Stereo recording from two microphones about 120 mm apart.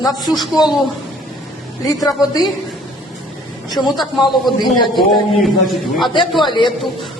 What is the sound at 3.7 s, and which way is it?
A man's voice, centre (ahead or behind).